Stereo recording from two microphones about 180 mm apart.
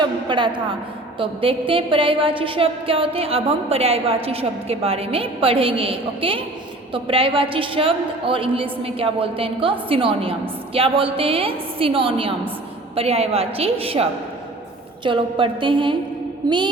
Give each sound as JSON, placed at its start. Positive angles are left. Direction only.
{"t": 0.0, "sound": "a woman's voice", "side_deg": -25}